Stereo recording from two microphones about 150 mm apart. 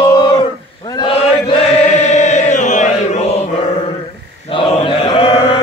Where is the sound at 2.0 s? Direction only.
50° left (ahead or behind).